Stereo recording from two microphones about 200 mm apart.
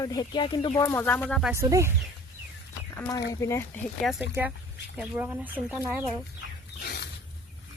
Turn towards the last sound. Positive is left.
turn(degrees=55)  # may be behind; listen again after turning